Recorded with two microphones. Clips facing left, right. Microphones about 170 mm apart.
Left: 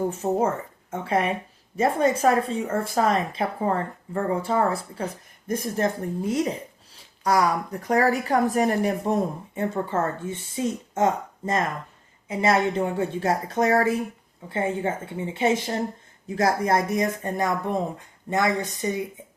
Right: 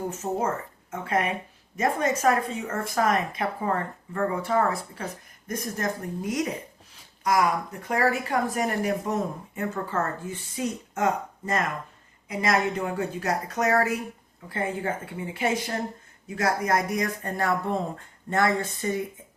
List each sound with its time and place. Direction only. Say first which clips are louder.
0.2 s a woman's voice: left 3 dB; 25° left (ahead or behind)